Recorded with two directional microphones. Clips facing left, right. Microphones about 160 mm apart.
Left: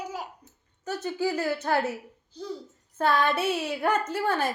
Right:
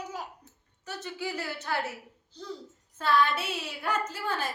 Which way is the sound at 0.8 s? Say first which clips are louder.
Left 8 dB; 45° left (ahead or behind).